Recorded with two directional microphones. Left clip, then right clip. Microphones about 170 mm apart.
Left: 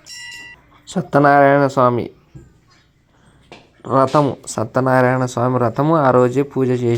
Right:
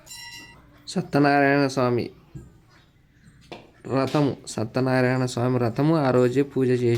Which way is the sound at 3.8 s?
15° left (ahead or behind).